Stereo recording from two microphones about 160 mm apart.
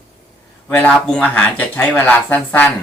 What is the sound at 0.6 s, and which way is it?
Speech, 10° left (ahead or behind).